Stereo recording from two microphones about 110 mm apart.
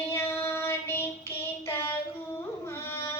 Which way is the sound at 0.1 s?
25° left (ahead or behind).